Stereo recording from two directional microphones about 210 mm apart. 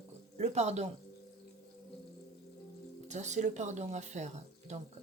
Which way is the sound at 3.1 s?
35° right (ahead or behind).